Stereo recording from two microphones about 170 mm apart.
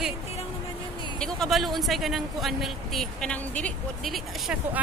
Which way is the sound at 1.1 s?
5° left (ahead or behind).